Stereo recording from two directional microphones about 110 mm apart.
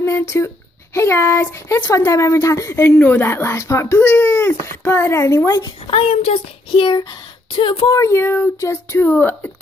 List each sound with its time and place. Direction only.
0.0 s a woman's voice: 25° left (ahead or behind)
5.9 s speech: 60° left (ahead or behind)
7.9 s a woman's voice: 25° left (ahead or behind)